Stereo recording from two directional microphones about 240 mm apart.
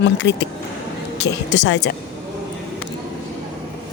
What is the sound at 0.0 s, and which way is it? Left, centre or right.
A woman's voice, left.